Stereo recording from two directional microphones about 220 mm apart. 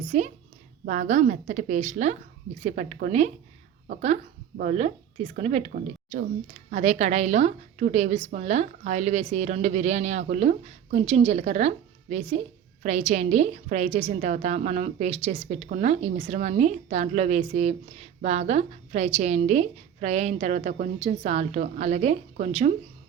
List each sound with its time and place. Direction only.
0.1 s a woman's voice: 35° right (ahead or behind)